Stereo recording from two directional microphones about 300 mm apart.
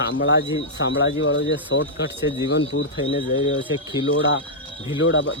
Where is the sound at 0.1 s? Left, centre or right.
Left.